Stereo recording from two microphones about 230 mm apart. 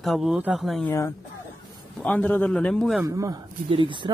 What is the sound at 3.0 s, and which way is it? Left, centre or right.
Speech, centre.